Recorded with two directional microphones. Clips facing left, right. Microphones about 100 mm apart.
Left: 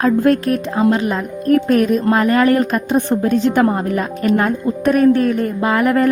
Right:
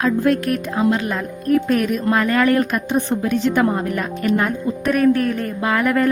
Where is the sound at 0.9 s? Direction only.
25° left (ahead or behind).